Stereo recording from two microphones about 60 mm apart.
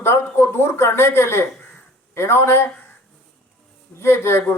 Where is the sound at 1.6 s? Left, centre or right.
Left.